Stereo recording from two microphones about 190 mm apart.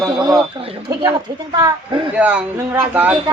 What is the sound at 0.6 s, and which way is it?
Speech, 30° right (ahead or behind).